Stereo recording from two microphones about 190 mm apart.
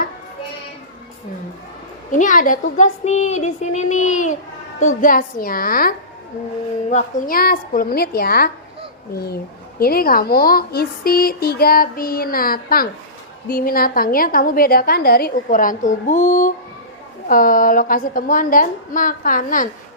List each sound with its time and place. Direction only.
2.1 s a woman's voice: 45° left (ahead or behind)